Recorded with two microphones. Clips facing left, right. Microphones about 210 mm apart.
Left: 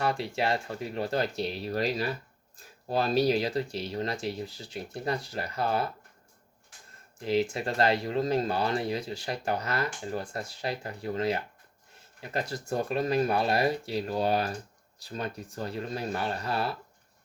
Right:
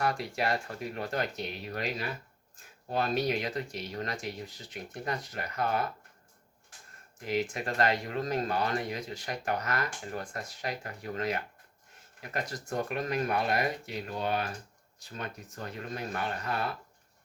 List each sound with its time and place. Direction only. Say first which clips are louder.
0.0 s speech: left 2 dB; 30° left (ahead or behind)
7.2 s speech: left 4 dB; 30° left (ahead or behind)